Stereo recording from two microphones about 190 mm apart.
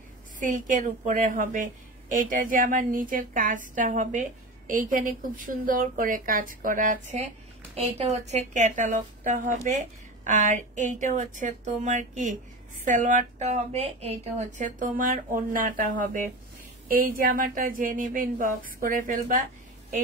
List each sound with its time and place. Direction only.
0.4 s a woman's voice: 40° right (ahead or behind)